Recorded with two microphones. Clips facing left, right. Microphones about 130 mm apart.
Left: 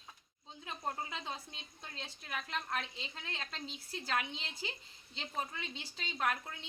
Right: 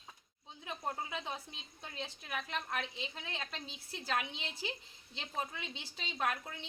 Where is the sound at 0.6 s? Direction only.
5° right (ahead or behind).